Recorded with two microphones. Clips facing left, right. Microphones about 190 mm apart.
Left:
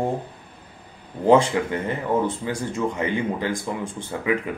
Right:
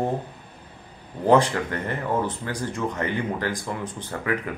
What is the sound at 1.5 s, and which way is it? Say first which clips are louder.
Speech: left 3 dB; 10° left (ahead or behind).